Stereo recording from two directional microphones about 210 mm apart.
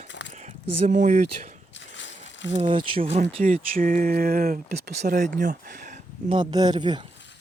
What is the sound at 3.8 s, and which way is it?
Speech, 40° right (ahead or behind).